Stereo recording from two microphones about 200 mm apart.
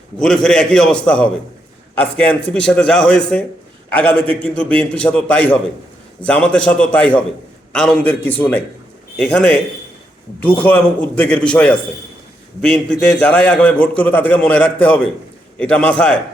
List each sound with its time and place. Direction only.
0.2 s a man's voice: 5° left (ahead or behind)